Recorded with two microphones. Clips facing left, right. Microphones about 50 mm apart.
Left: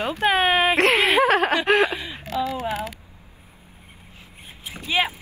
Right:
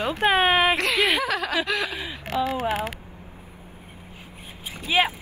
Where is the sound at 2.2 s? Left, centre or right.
Right.